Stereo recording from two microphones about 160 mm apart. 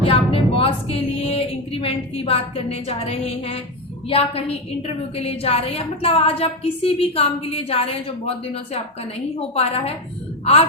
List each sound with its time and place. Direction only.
0.0 s a sound: 35° left (ahead or behind)
4.1 s a woman's voice: 35° left (ahead or behind)
10.4 s a woman's voice: 40° left (ahead or behind)